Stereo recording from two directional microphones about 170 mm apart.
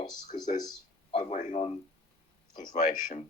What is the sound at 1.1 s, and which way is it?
Speech, 45° left (ahead or behind).